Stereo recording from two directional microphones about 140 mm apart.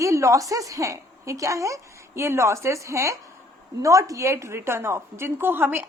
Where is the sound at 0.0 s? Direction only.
20° right (ahead or behind).